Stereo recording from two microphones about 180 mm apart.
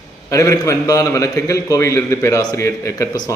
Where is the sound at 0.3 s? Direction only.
20° left (ahead or behind).